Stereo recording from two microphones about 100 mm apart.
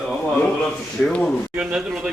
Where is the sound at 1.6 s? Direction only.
10° right (ahead or behind).